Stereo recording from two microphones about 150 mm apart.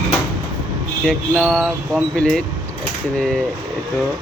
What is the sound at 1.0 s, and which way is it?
Speech, centre (ahead or behind).